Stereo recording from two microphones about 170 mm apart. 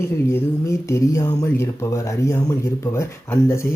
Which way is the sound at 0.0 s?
15° left (ahead or behind).